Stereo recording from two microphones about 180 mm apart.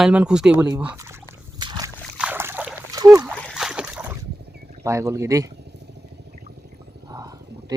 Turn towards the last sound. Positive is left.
turn(degrees=-20)  # may be behind; listen again after turning